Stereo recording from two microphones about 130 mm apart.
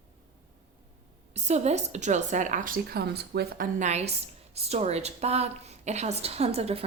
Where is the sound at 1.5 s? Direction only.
60° right (ahead or behind); by 2.8 s 90° right.